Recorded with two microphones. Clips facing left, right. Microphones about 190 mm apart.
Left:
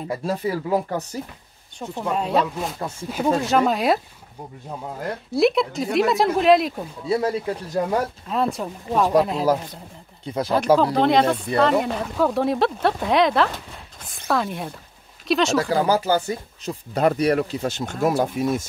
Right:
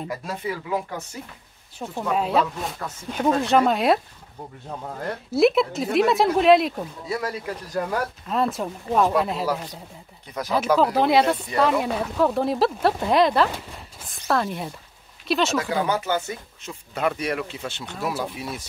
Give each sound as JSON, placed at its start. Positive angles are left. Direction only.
{"t": 0.1, "sound": "speech", "side_deg": 35}
{"t": 1.8, "sound": "speech", "side_deg": -5}
{"t": 7.1, "sound": "speech", "side_deg": 25}
{"t": 8.3, "sound": "speech", "side_deg": 0}
{"t": 10.2, "sound": "speech", "side_deg": 30}
{"t": 10.8, "sound": "speech", "side_deg": -5}
{"t": 15.7, "sound": "speech", "side_deg": 35}